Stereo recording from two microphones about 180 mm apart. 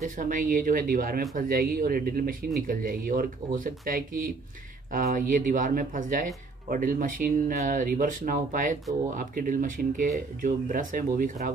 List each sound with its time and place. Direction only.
0.0 s speech: 50° right (ahead or behind)